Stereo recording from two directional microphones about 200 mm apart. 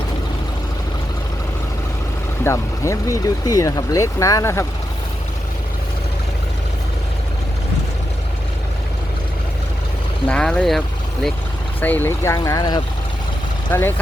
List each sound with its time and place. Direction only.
2.4 s speech: 15° left (ahead or behind)
10.2 s speech: 5° left (ahead or behind)